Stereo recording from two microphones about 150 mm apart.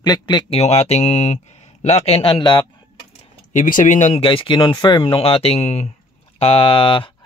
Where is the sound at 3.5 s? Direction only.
60° left (ahead or behind).